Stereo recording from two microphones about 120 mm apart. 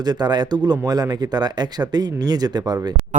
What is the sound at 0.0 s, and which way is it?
Speech, 35° right (ahead or behind).